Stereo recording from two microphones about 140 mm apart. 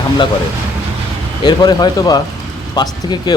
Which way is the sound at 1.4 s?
30° left (ahead or behind).